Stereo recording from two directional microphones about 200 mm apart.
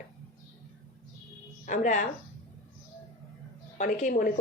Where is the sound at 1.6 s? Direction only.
40° left (ahead or behind).